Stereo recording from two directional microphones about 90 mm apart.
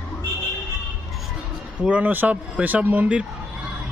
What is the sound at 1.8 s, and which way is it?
A man's voice, 15° right (ahead or behind).